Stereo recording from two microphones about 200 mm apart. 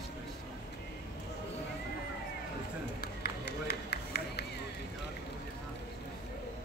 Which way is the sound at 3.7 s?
55° left (ahead or behind).